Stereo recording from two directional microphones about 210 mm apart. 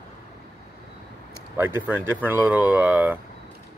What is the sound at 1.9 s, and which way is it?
Speech, 10° right (ahead or behind).